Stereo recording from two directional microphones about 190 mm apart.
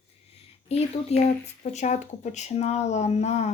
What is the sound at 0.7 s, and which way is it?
Speech, 35° left (ahead or behind).